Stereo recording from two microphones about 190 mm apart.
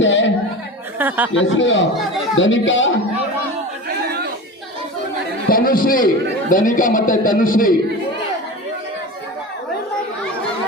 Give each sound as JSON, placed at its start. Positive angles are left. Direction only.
{"t": 0.0, "sound": "a sound", "side_deg": 75}
{"t": 0.9, "sound": "speech", "side_deg": -10}
{"t": 1.3, "sound": "a man's voice", "side_deg": 75}
{"t": 3.8, "sound": "chatter", "side_deg": -55}
{"t": 5.5, "sound": "a man's voice", "side_deg": 50}